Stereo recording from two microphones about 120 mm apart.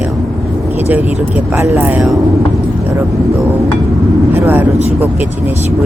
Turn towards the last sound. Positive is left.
turn(degrees=-15)  # may be behind; listen again after turning